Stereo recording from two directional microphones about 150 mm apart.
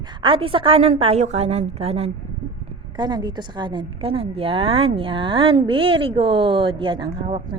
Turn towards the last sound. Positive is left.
turn(degrees=-35)  # may be behind; listen again after turning